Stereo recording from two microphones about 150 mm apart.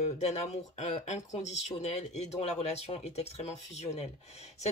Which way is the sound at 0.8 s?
50° left (ahead or behind).